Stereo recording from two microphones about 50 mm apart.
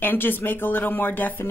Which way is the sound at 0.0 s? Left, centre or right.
Left.